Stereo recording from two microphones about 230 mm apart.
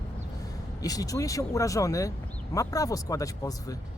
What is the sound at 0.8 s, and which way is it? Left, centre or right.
Speech, centre.